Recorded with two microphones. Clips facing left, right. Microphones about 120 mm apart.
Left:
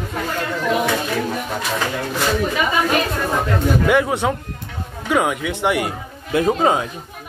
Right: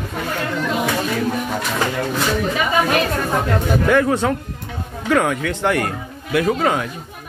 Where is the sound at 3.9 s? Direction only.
15° left (ahead or behind).